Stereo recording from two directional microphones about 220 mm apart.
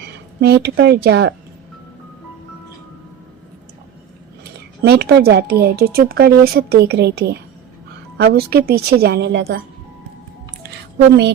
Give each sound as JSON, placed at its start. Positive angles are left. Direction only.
{"t": 0.0, "sound": "a woman's voice", "side_deg": -50}
{"t": 4.4, "sound": "speech", "side_deg": -45}